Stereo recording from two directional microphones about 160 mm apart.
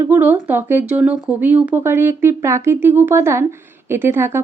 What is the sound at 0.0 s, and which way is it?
Speech, 10° right (ahead or behind).